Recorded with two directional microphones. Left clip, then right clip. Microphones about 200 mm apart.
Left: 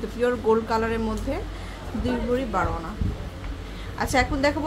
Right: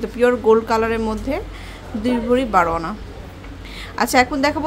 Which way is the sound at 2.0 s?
45° right (ahead or behind).